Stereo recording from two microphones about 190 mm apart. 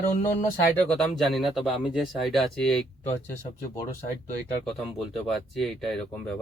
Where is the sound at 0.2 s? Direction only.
40° left (ahead or behind).